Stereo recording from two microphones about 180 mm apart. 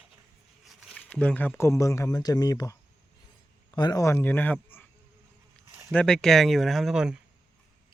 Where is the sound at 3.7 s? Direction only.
20° left (ahead or behind).